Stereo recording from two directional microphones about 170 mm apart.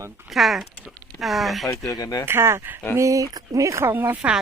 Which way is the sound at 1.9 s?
20° left (ahead or behind).